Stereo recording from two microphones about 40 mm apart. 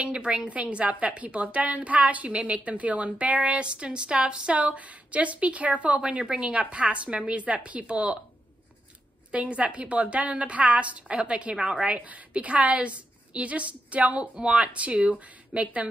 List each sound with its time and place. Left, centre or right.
0.0 s a woman's voice: right
5.9 s a woman's voice: right
9.3 s a woman's voice: right